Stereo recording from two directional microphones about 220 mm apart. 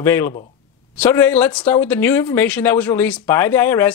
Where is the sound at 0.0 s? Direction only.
10° left (ahead or behind).